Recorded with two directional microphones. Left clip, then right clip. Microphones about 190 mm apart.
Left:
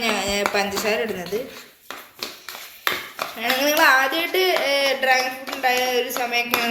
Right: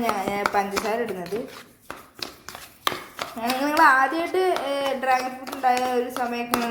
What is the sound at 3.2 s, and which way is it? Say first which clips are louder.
Speech: left 4 dB; 35° right (ahead or behind).